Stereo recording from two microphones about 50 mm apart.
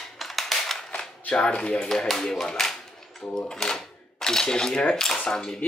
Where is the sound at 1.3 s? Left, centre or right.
Centre.